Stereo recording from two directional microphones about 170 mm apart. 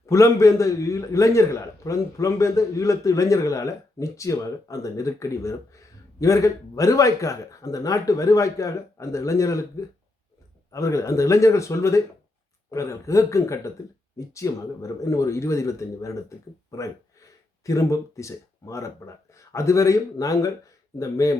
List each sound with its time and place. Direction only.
0.0 s a man's voice: 15° left (ahead or behind)